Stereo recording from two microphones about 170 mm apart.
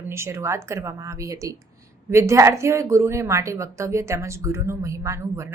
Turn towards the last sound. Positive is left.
turn(degrees=-15)  # may be behind; listen again after turning